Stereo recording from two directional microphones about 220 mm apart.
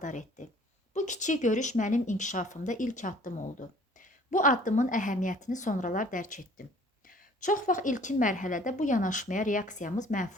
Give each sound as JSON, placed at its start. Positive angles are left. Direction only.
{"t": 0.0, "sound": "a woman's voice", "side_deg": 35}